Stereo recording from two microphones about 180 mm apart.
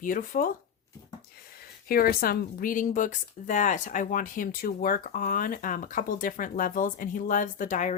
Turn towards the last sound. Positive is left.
turn(degrees=45)  # may be behind; listen again after turning